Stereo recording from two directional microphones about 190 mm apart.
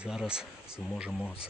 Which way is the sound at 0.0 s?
5° right (ahead or behind).